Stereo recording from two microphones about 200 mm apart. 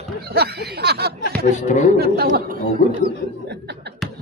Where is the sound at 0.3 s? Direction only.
55° right (ahead or behind).